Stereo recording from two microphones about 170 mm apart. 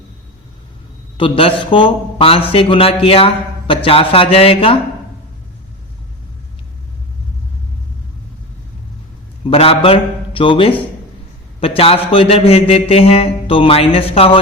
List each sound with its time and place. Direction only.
1.1 s mantra: 30° left (ahead or behind)
9.5 s mantra: 35° left (ahead or behind)